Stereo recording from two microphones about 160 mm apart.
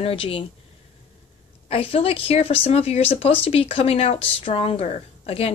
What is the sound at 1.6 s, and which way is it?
Speech, 35° left (ahead or behind).